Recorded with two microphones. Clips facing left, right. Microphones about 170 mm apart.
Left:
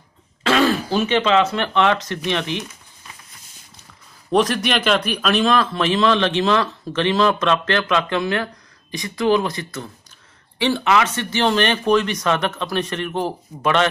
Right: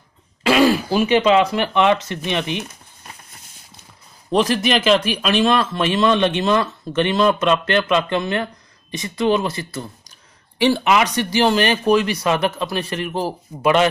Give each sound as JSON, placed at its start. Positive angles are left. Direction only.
{"t": 0.4, "sound": "speech", "side_deg": -10}
{"t": 4.6, "sound": "a man's voice", "side_deg": 0}
{"t": 10.6, "sound": "speech", "side_deg": -15}